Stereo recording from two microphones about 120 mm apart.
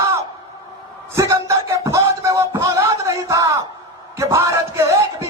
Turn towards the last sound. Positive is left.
turn(degrees=-25)  # may be behind; listen again after turning